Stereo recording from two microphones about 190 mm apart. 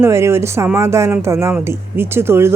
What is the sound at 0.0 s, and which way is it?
Speech, 15° right (ahead or behind).